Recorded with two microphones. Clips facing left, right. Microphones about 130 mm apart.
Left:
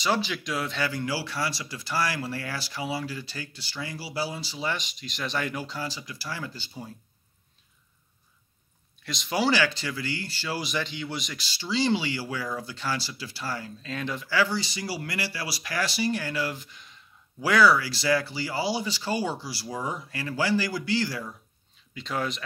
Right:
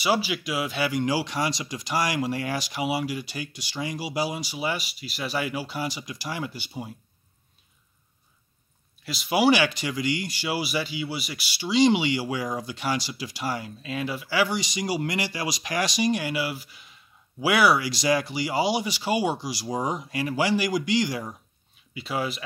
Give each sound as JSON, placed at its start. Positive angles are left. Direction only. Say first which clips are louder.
{"t": 0.0, "sound": "speech", "louder": "right 2 dB", "side_deg": -10}
{"t": 9.0, "sound": "speech", "louder": "right 5 dB", "side_deg": -5}
{"t": 21.9, "sound": "speech", "louder": "right 1 dB", "side_deg": -10}